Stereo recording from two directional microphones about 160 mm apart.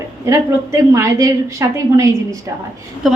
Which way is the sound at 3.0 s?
Centre (ahead or behind).